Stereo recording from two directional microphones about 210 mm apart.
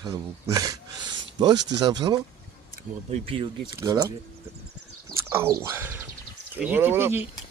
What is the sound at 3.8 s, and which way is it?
Speech, 15° right (ahead or behind).